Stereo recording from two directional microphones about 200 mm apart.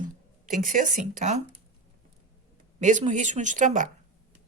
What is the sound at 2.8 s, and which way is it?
Speech, 40° right (ahead or behind).